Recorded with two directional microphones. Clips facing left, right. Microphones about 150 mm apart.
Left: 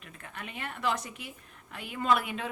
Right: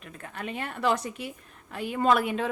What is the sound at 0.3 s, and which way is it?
A woman's voice, 35° right (ahead or behind).